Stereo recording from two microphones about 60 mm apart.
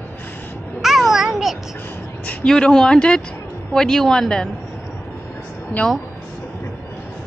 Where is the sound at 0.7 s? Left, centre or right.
Centre.